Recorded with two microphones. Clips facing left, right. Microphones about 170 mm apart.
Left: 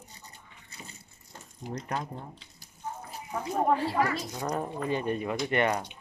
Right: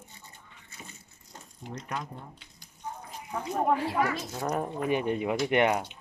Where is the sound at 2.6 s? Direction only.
10° left (ahead or behind).